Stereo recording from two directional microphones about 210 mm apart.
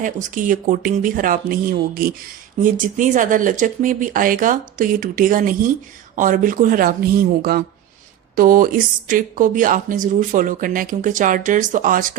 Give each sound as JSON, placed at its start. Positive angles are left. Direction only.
{"t": 0.0, "sound": "speech", "side_deg": -40}